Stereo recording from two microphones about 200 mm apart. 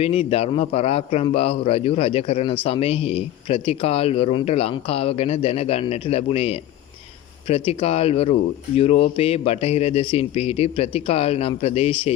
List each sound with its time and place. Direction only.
0.0 s a man's voice: 30° left (ahead or behind)